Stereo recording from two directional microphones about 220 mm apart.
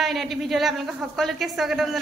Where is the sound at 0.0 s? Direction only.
Centre (ahead or behind).